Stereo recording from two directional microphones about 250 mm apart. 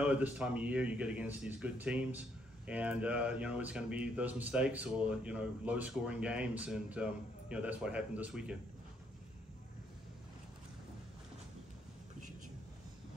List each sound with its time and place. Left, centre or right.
0.0 s speech: centre